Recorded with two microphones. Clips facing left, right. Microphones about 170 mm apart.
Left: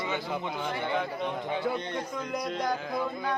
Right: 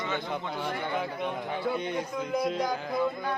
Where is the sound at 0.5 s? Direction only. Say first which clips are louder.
Left 1 dB; 5° right (ahead or behind).